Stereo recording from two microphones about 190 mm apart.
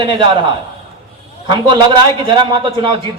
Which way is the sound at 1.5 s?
25° right (ahead or behind).